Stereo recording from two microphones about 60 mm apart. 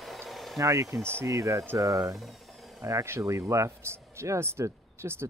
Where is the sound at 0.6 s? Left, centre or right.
Right.